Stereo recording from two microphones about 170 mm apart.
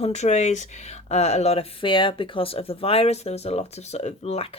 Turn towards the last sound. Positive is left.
turn(degrees=40)  # may be behind; listen again after turning